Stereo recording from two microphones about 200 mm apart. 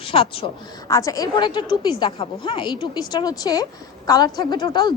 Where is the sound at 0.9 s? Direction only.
15° left (ahead or behind).